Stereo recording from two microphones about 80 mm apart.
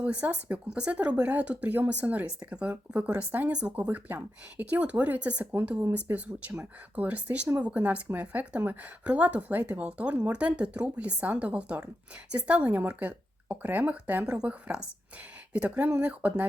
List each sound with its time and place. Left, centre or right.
0.0 s a woman's voice: centre